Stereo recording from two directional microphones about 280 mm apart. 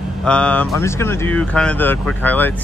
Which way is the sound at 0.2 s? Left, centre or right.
Centre.